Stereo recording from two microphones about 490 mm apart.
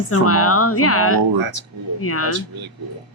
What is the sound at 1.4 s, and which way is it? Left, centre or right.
Speech, right.